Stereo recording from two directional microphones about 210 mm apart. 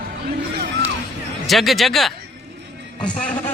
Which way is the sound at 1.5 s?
Centre (ahead or behind).